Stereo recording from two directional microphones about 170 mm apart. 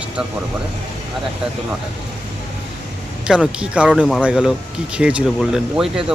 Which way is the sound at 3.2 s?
5° right (ahead or behind).